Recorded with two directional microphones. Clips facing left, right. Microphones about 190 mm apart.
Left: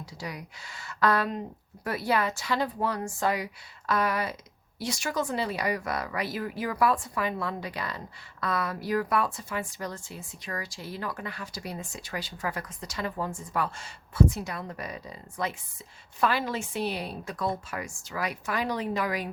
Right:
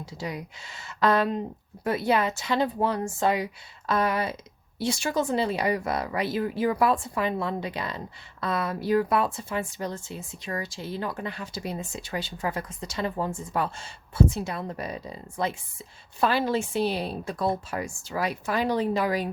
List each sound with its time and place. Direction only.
0.0 s speech: 25° right (ahead or behind)